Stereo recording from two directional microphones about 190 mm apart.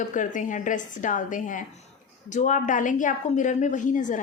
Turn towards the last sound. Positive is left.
turn(degrees=40)  # may be behind; listen again after turning